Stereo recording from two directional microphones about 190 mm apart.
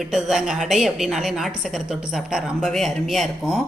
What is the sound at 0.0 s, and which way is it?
Speech, centre (ahead or behind).